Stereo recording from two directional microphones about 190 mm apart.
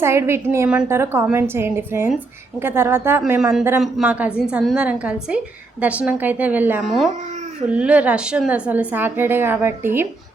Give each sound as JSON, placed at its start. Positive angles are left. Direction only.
{"t": 0.0, "sound": "a woman's voice", "side_deg": -15}